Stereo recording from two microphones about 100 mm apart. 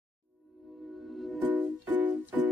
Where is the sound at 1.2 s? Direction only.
Centre (ahead or behind).